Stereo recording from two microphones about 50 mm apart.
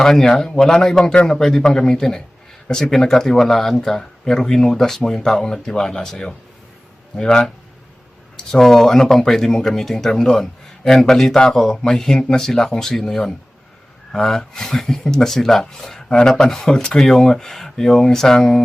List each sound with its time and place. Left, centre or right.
0.0 s a man's voice: centre
1.4 s speech: centre